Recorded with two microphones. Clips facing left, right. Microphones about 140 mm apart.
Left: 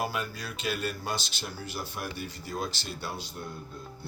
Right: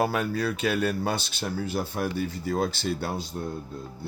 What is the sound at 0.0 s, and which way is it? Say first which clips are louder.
Speech: right 8 dB; 60° right (ahead or behind).